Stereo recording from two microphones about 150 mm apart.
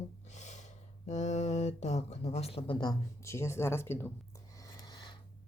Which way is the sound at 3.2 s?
20° left (ahead or behind).